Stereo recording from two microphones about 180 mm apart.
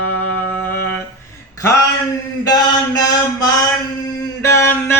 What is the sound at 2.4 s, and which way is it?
Mantra, 20° left (ahead or behind).